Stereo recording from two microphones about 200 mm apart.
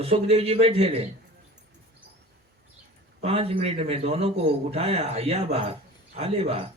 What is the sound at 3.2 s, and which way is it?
A man's voice, 30° right (ahead or behind).